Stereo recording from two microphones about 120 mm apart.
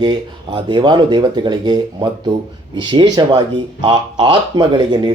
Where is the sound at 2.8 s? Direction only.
40° right (ahead or behind).